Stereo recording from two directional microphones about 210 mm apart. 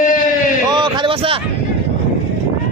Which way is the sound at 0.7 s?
25° right (ahead or behind).